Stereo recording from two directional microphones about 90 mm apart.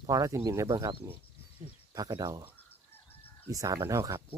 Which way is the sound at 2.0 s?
45° right (ahead or behind).